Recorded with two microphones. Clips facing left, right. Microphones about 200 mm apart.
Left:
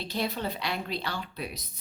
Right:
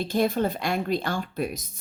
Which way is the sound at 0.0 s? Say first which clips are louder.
Right 8 dB; 50° right (ahead or behind).